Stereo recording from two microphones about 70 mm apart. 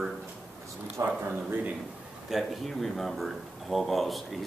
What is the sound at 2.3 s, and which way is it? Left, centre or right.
Speech, centre.